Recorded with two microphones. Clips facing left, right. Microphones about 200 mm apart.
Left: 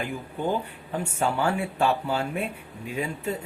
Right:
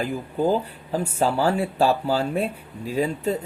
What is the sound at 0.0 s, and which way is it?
Speech, 35° right (ahead or behind).